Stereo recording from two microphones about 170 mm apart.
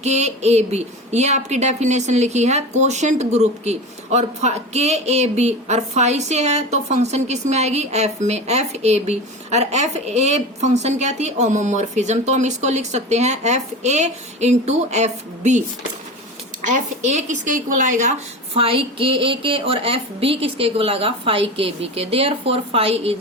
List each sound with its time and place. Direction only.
0.0 s a woman's voice: 40° right (ahead or behind)
17.2 s a woman's voice: 45° right (ahead or behind)
18.5 s a woman's voice: 30° right (ahead or behind)